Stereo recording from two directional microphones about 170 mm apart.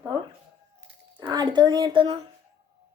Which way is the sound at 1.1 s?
25° right (ahead or behind).